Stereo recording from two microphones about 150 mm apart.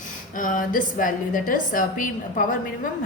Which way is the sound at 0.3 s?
65° left (ahead or behind).